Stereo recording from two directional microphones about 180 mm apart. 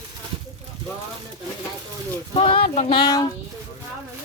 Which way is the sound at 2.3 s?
30° left (ahead or behind).